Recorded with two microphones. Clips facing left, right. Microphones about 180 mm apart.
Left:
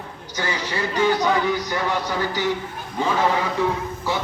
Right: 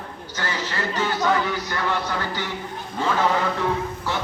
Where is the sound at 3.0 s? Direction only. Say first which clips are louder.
Left 1 dB; 15° left (ahead or behind).